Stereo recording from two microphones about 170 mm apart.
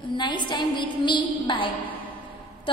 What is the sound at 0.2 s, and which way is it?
A woman's voice, 25° left (ahead or behind).